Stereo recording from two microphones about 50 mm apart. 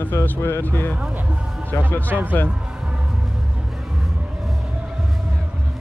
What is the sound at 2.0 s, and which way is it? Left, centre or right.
Speech, right.